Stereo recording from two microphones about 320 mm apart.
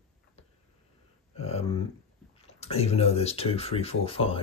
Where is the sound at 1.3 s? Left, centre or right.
Centre.